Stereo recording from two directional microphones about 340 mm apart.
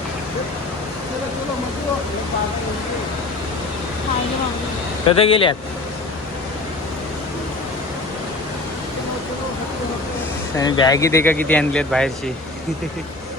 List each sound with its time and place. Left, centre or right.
5.0 s speech: centre
10.6 s speech: centre